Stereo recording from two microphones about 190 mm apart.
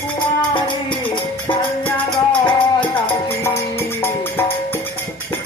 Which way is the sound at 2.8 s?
10° left (ahead or behind).